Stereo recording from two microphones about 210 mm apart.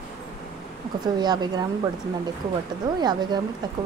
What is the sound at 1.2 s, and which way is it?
Speech, 20° right (ahead or behind).